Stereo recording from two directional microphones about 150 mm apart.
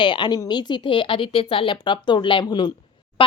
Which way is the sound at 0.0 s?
30° left (ahead or behind).